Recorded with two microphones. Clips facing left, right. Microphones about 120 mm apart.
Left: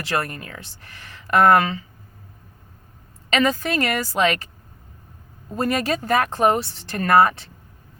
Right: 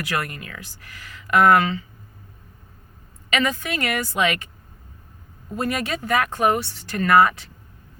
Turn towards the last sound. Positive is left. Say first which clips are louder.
# even
turn(degrees=30)  # may be behind; listen again after turning